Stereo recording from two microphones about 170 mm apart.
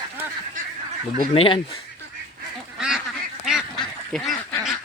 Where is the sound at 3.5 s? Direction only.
Centre (ahead or behind).